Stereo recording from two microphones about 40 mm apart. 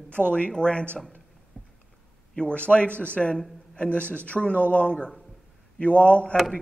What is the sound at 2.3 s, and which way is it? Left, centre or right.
A man's voice, left.